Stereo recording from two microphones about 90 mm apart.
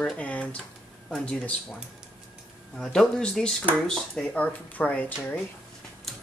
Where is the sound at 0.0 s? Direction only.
10° left (ahead or behind).